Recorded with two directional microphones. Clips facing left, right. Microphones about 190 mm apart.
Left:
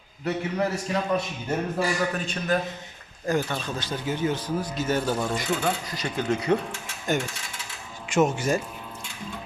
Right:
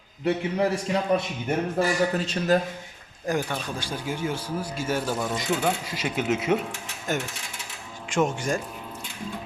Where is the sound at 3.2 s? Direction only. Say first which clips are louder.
Left 1 dB; 15° right (ahead or behind).